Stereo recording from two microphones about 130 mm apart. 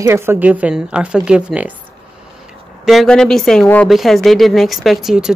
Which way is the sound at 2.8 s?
Centre (ahead or behind).